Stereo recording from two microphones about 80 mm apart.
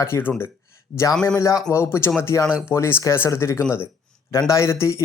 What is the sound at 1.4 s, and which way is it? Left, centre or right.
Speech, left.